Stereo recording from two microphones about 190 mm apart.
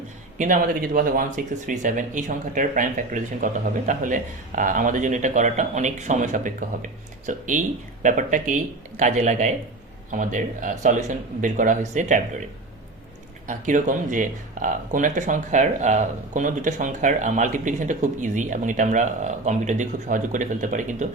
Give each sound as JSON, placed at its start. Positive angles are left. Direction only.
{"t": 0.3, "sound": "speech", "side_deg": -45}
{"t": 13.5, "sound": "speech", "side_deg": -40}